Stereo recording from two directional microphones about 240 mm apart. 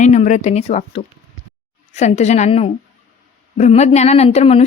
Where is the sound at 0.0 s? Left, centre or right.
Left.